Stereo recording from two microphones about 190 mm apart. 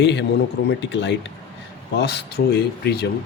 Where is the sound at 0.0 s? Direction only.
65° left (ahead or behind).